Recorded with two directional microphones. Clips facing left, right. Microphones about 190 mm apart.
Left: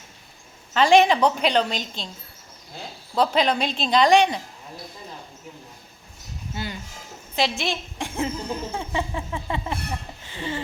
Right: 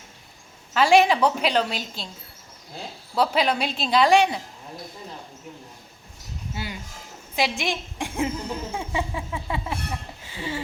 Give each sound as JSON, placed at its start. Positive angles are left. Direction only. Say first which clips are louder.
{"t": 0.7, "sound": "a woman's voice", "louder": "left 1 dB", "side_deg": -5}
{"t": 3.2, "sound": "a woman's voice", "louder": "left 1 dB", "side_deg": -5}
{"t": 6.5, "sound": "a woman's voice", "louder": "left 2 dB", "side_deg": -10}
{"t": 8.7, "sound": "a sound", "louder": "left 1 dB", "side_deg": -10}